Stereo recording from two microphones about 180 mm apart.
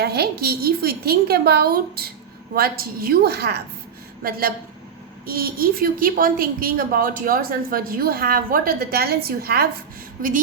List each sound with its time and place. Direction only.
0.0 s a woman's voice: 65° right (ahead or behind)